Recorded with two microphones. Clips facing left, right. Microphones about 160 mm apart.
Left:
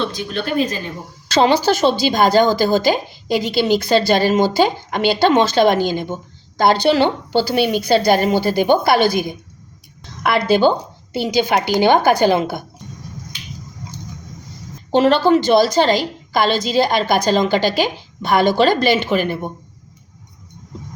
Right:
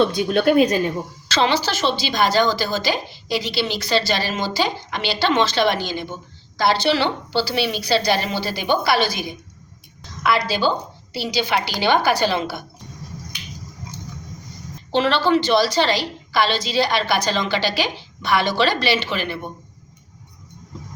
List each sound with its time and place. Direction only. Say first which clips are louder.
0.1 s a woman's voice: right 7 dB; 60° right (ahead or behind)
1.3 s a woman's voice: left 6 dB; 50° left (ahead or behind)
14.9 s a woman's voice: left 5 dB; 45° left (ahead or behind)